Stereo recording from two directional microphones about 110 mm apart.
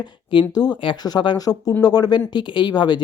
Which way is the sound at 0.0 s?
45° left (ahead or behind).